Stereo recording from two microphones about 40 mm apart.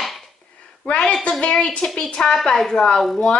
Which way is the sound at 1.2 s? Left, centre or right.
Left.